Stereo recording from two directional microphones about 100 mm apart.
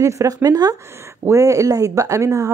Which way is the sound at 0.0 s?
35° right (ahead or behind).